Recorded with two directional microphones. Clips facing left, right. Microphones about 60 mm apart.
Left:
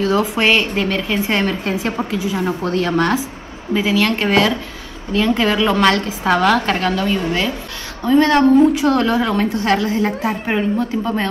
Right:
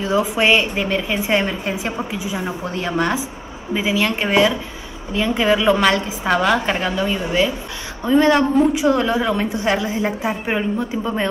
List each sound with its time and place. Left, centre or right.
0.0 s a woman's voice: centre